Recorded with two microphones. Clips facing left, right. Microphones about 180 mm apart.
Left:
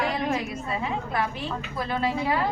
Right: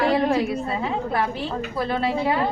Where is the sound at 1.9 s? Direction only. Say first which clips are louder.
Right 2 dB; 30° right (ahead or behind).